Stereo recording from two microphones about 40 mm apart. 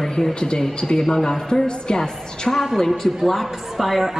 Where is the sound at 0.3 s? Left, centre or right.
Left.